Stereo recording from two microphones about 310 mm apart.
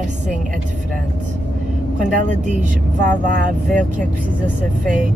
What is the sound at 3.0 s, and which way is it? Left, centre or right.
Speech, right.